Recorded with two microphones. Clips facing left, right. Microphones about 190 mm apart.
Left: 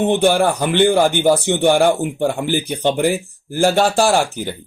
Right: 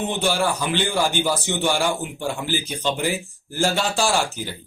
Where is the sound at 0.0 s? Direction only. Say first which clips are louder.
Left 8 dB; 55° left (ahead or behind).